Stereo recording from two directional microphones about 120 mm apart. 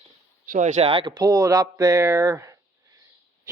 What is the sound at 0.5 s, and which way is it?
Speech, 80° right.